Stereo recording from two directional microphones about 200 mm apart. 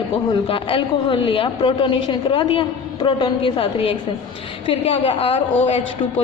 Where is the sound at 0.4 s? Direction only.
25° left (ahead or behind).